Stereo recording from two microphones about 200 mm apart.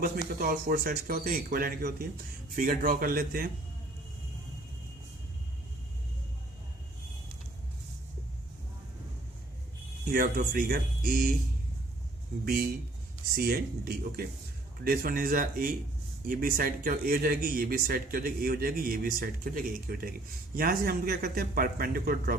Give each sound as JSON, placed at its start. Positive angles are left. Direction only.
{"t": 0.0, "sound": "speech", "side_deg": -45}
{"t": 10.1, "sound": "speech", "side_deg": -45}
{"t": 13.3, "sound": "speech", "side_deg": -50}